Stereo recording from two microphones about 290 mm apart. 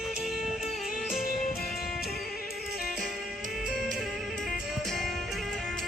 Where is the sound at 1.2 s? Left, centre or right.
Left.